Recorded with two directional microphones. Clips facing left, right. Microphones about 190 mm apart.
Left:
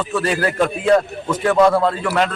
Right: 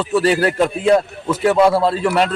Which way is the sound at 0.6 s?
10° right (ahead or behind).